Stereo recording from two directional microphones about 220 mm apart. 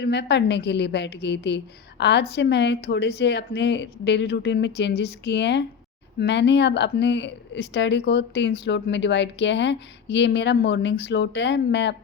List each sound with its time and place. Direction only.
0.0 s speech: 50° left (ahead or behind)